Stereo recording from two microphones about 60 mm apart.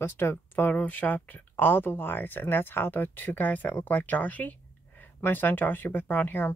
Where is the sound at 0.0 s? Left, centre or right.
Left.